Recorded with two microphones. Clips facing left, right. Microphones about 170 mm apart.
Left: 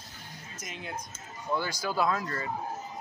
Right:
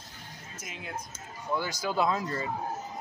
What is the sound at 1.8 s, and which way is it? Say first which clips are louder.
Speech: right 2 dB; 20° right (ahead or behind).